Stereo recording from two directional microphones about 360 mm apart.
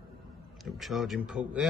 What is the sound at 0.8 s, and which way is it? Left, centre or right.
Speech, centre.